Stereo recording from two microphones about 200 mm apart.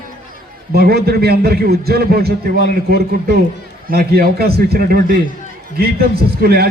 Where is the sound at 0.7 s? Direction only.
50° right (ahead or behind).